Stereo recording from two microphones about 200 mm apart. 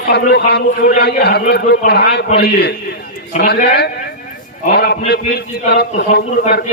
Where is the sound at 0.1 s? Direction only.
55° left (ahead or behind).